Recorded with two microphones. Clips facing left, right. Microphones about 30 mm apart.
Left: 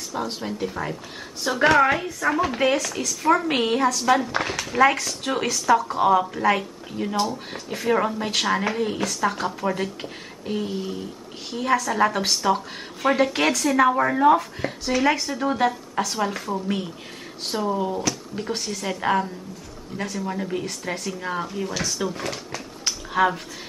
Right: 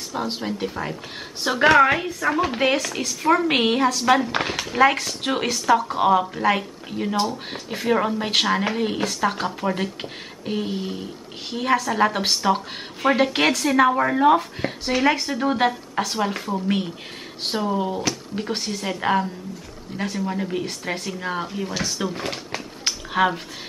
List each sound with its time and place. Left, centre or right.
0.3 s speech: right
3.2 s speech: centre
3.4 s speech: right; by 20.6 s centre
20.6 s speech: right